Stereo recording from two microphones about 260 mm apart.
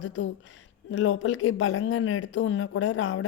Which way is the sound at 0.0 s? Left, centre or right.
Left.